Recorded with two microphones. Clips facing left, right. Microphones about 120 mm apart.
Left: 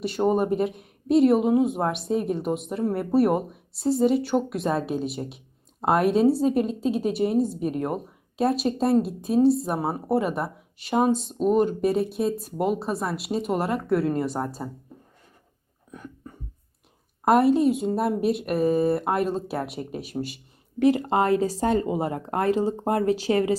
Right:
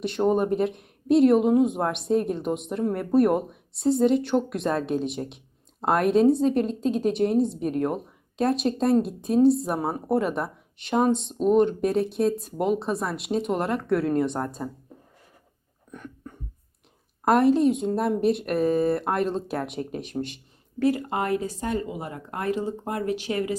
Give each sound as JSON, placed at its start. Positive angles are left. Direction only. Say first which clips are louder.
{"t": 0.0, "sound": "a woman's voice", "louder": "even", "side_deg": 5}
{"t": 15.9, "sound": "a sound", "louder": "even", "side_deg": 5}
{"t": 17.2, "sound": "a woman's voice", "louder": "even", "side_deg": 0}
{"t": 20.7, "sound": "speech", "louder": "left 3 dB", "side_deg": 20}
{"t": 21.0, "sound": "speech", "louder": "left 5 dB", "side_deg": 30}